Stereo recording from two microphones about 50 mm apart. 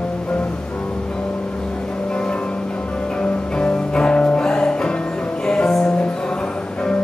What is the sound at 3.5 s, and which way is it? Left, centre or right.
Music, centre.